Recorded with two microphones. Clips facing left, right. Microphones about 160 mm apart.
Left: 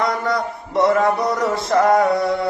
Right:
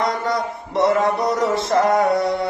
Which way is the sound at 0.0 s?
20° right (ahead or behind).